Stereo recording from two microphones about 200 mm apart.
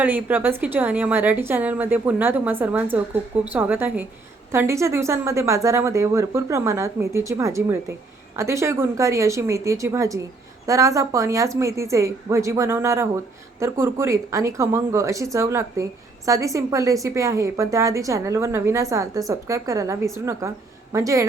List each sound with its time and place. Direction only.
0.0 s a woman's voice: 10° right (ahead or behind)